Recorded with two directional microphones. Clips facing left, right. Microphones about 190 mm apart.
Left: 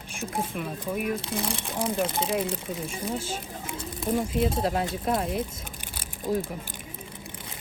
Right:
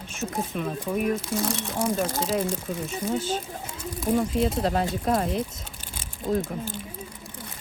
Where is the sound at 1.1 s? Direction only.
30° left (ahead or behind).